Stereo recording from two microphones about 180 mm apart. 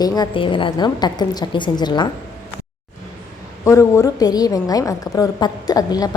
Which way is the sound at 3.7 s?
15° left (ahead or behind).